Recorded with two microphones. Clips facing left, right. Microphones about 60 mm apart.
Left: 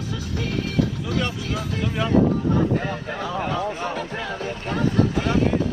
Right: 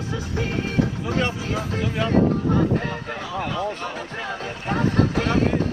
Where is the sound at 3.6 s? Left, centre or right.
Centre.